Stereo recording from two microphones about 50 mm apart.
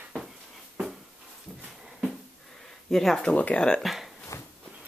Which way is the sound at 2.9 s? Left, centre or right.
Centre.